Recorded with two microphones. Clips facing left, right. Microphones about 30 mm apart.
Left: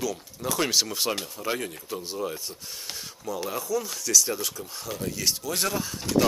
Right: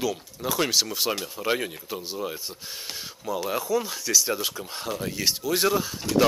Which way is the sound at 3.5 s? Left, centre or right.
Right.